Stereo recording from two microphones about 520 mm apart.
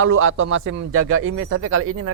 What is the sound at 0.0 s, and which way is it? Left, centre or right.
Speech, right.